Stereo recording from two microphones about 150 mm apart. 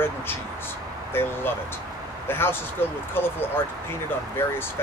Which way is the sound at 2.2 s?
15° left (ahead or behind).